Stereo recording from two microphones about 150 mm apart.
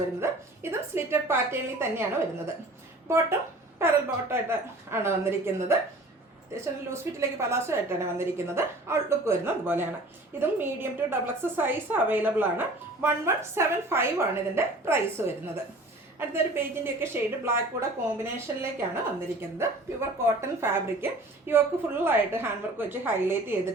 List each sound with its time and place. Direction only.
0.2 s a woman's voice: 15° right (ahead or behind)